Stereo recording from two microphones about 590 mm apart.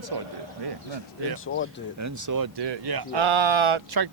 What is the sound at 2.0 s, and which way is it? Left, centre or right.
Speech, right.